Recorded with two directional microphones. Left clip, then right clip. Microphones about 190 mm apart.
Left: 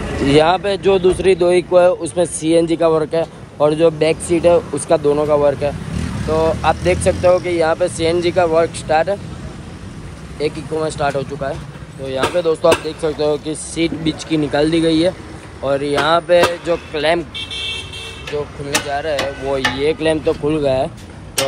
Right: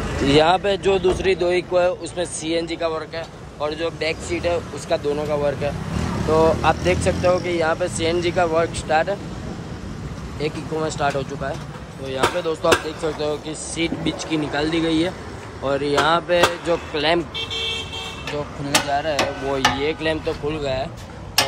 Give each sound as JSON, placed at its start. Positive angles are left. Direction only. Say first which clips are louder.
{"t": 0.3, "sound": "speech", "louder": "left 3 dB", "side_deg": -10}
{"t": 6.0, "sound": "vehicle", "louder": "even", "side_deg": -25}
{"t": 6.6, "sound": "speech", "louder": "left 4 dB", "side_deg": -10}
{"t": 10.4, "sound": "speech", "louder": "left 5 dB", "side_deg": -10}
{"t": 17.4, "sound": "vehicle", "louder": "left 1 dB", "side_deg": -50}
{"t": 18.9, "sound": "speech", "louder": "left 2 dB", "side_deg": -15}